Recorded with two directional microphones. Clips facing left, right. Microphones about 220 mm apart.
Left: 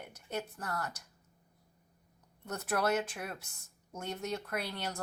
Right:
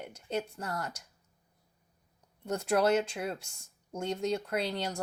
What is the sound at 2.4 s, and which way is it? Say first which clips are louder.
Speech: right 5 dB; 30° right (ahead or behind).